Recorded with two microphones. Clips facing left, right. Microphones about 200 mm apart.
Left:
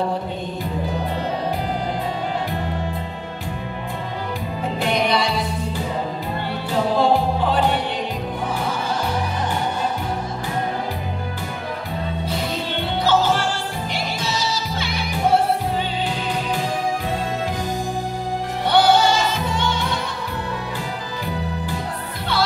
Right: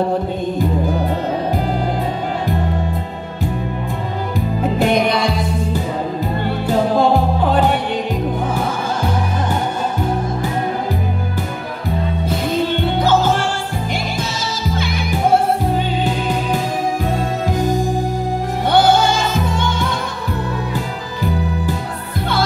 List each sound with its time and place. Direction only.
7.0 s music: 50° right (ahead or behind)
13.0 s music: 50° right (ahead or behind)
18.7 s music: 50° right (ahead or behind)